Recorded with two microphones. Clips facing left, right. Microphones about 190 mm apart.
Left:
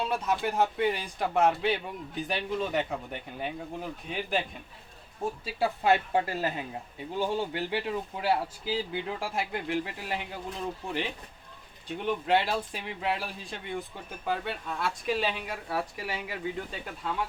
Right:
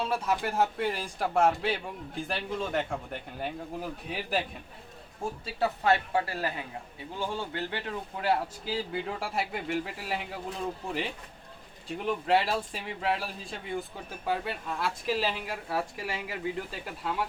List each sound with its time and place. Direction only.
0.0 s speech: centre (ahead or behind)